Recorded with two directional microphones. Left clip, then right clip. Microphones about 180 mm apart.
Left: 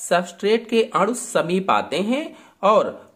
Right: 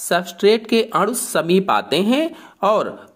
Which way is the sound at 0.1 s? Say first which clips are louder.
Right 3 dB; 35° right (ahead or behind).